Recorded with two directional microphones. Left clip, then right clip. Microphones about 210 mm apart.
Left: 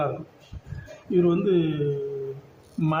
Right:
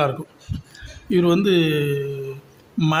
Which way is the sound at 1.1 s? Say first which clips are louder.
Right 4 dB; 35° right (ahead or behind).